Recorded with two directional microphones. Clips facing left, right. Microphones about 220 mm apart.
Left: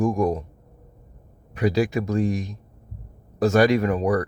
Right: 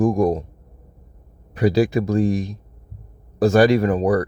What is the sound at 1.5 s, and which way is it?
Speech, 35° right (ahead or behind).